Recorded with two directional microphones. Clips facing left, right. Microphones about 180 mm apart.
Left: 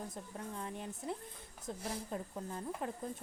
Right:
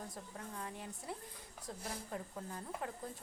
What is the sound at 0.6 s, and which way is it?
Speech, 20° left (ahead or behind).